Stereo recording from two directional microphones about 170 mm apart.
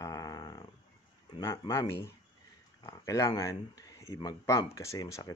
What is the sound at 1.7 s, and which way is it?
Speech, 15° left (ahead or behind).